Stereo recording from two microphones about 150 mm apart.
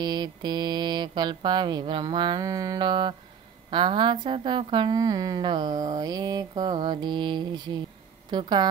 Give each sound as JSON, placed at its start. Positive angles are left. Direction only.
{"t": 0.0, "sound": "a woman's voice", "side_deg": -30}